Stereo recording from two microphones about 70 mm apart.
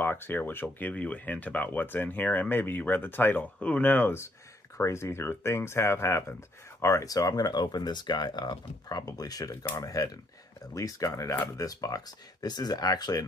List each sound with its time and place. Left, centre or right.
0.0 s speech: left
4.7 s speech: left
11.4 s speech: left
12.4 s speech: left